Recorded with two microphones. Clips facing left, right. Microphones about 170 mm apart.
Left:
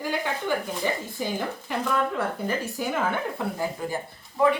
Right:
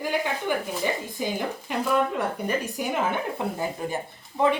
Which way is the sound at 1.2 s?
15° right (ahead or behind).